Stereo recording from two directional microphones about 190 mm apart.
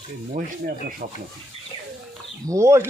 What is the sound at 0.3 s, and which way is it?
Rub, 45° right (ahead or behind).